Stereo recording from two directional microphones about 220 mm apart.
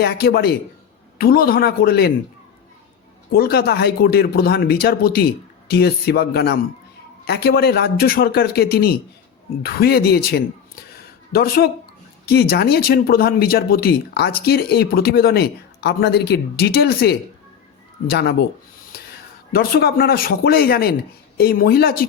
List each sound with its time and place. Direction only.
0.0 s speech: 45° left (ahead or behind)
3.3 s speech: 45° left (ahead or behind)
10.9 s a sound: 45° left (ahead or behind)
12.2 s speech: 45° left (ahead or behind)
19.5 s speech: 45° left (ahead or behind)